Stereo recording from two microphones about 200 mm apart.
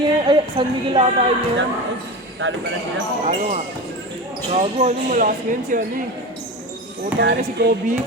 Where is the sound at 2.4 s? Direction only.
65° right (ahead or behind).